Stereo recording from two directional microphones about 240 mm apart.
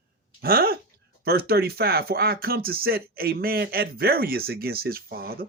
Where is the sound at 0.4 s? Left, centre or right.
Right.